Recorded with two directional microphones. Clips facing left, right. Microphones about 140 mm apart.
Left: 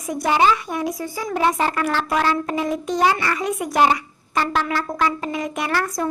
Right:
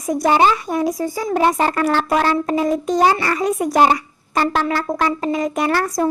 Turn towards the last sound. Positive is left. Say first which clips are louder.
# right 5 dB
turn(degrees=-40)  # may be behind; listen again after turning